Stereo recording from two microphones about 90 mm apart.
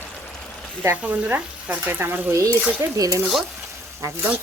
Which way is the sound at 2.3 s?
35° right (ahead or behind).